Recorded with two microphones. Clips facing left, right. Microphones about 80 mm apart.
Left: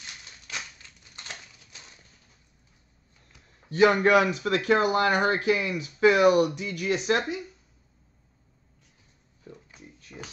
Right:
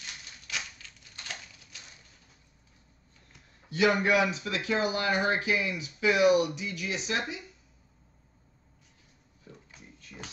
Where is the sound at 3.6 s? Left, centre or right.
Left.